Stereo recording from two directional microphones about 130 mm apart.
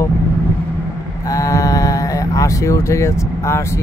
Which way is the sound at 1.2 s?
25° left (ahead or behind).